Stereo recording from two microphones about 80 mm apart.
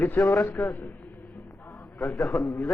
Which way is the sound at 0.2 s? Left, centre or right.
Left.